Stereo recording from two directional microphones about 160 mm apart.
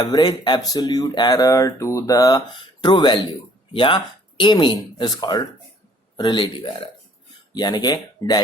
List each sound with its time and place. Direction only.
0.0 s speech: 25° left (ahead or behind)